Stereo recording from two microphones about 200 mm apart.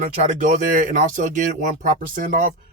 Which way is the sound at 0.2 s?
35° right (ahead or behind).